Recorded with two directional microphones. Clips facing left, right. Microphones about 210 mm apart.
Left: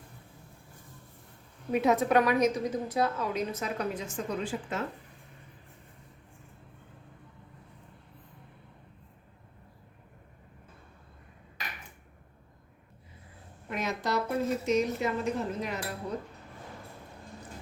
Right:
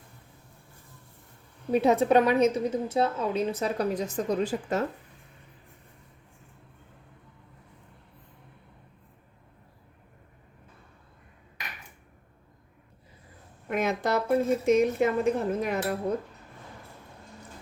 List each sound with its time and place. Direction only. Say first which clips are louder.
1.7 s a woman's voice: right 4 dB; 30° right (ahead or behind)
13.7 s a woman's voice: right 5 dB; 55° right (ahead or behind)